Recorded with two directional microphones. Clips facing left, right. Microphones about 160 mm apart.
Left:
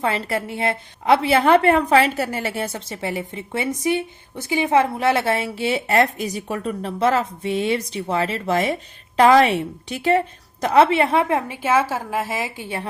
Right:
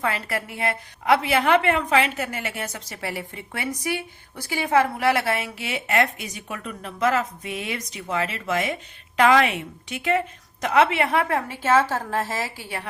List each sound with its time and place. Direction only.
0.0 s a woman's voice: 25° left (ahead or behind)